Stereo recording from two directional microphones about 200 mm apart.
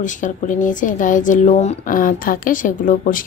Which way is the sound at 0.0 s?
40° left (ahead or behind).